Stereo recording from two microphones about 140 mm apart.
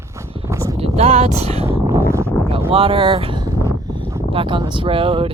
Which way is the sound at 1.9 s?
20° right (ahead or behind).